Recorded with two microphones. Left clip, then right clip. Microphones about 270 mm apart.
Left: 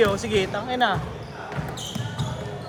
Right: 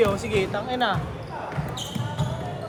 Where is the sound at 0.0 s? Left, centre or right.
Left.